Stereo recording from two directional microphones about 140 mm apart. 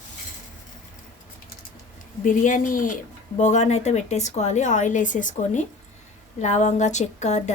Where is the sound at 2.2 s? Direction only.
65° left (ahead or behind).